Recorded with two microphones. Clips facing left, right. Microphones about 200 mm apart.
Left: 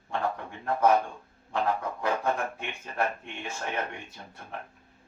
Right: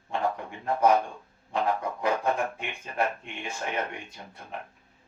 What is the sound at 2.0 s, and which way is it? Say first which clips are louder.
Speech: right 2 dB; 15° right (ahead or behind).